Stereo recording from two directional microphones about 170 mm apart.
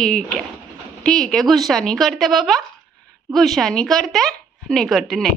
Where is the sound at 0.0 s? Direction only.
5° left (ahead or behind).